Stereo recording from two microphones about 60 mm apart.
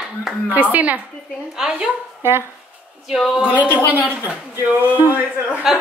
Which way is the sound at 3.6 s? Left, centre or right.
Right.